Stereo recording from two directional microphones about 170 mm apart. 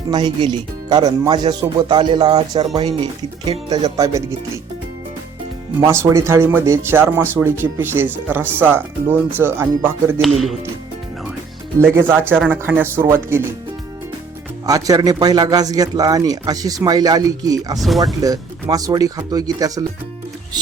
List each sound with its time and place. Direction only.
0.1 s a man's voice: 25° right (ahead or behind)
3.8 s a man's voice: 20° right (ahead or behind)
5.8 s speech: 15° right (ahead or behind)
10.2 s speech: centre (ahead or behind)
11.8 s speech: 10° right (ahead or behind)
14.7 s a man's voice: 20° right (ahead or behind)
17.7 s speech: centre (ahead or behind)
18.0 s a man's voice: 20° right (ahead or behind)